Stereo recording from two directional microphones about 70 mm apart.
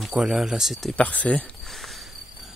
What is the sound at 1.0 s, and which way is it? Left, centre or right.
Speech, left.